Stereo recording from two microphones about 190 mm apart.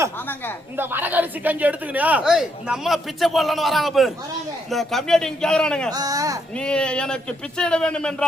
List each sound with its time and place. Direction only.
0.8 s speech: 10° right (ahead or behind); by 5.9 s 5° left (ahead or behind)
5.9 s speech: 20° right (ahead or behind)
6.6 s speech: 5° left (ahead or behind)